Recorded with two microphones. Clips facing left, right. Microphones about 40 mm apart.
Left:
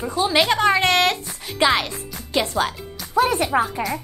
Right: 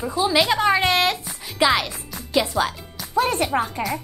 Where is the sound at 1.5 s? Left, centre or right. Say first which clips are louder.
Even; centre.